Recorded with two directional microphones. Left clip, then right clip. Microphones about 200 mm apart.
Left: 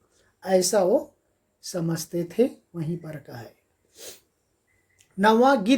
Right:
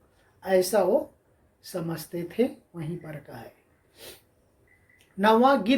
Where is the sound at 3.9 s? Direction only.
60° left (ahead or behind).